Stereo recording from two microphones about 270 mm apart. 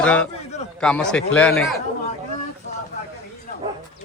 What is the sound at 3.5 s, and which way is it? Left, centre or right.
Speech, left.